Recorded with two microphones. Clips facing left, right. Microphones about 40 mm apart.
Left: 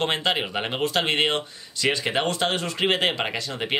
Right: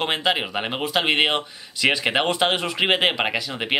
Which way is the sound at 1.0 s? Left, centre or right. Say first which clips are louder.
Right 3 dB; right.